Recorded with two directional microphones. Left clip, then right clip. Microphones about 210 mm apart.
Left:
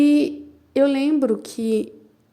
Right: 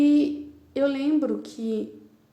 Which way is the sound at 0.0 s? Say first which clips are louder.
Left 3 dB; 45° left (ahead or behind).